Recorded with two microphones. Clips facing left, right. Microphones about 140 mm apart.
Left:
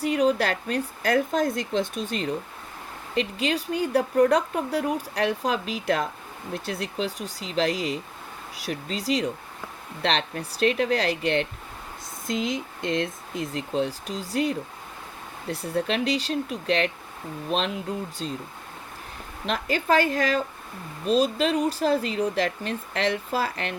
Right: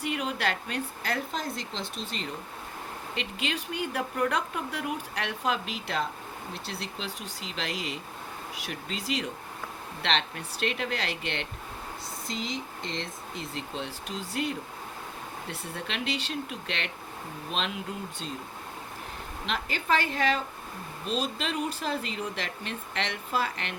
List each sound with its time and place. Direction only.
0.0 s speech: 40° left (ahead or behind)
12.9 s speech: 50° left (ahead or behind)
19.5 s speech: 40° left (ahead or behind)